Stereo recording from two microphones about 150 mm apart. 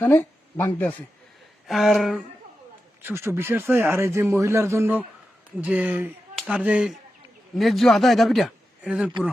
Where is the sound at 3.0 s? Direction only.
15° right (ahead or behind).